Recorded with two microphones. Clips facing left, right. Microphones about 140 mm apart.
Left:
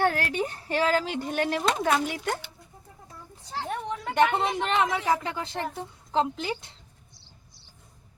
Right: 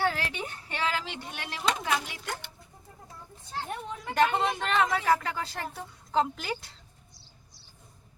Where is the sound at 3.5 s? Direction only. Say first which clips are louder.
Left 4 dB; 80° left.